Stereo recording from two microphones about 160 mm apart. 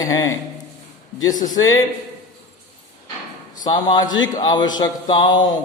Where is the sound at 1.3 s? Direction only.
55° left (ahead or behind).